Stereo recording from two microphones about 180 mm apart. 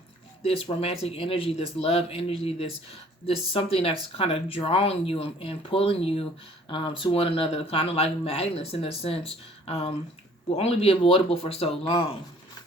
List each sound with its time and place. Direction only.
0.4 s speech: 35° left (ahead or behind)